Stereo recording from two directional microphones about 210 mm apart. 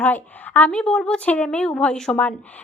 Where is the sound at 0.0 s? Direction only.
10° left (ahead or behind).